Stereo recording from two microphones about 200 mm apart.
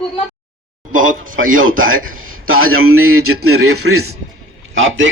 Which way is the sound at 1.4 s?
90° right.